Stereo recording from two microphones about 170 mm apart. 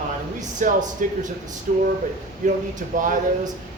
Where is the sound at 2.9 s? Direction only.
50° right (ahead or behind).